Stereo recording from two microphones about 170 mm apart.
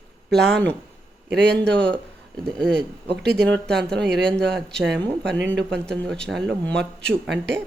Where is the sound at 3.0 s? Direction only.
75° right (ahead or behind).